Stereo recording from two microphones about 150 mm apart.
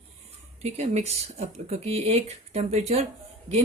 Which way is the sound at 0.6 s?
50° right (ahead or behind).